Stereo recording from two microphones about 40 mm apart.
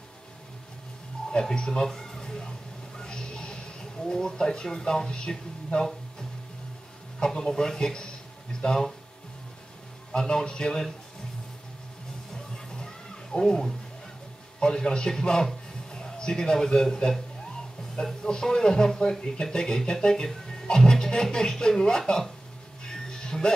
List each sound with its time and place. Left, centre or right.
1.4 s speech: centre
3.0 s a sound: centre
4.0 s speech: centre
7.2 s speech: centre
10.1 s speech: centre
12.7 s music: centre
14.6 s a man's voice: centre
18.2 s speech: centre
22.8 s music: centre